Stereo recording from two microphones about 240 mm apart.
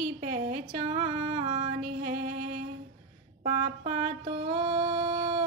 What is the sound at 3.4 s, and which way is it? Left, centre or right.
Mantra, right.